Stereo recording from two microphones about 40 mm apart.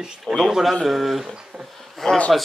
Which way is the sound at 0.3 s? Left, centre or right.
Centre.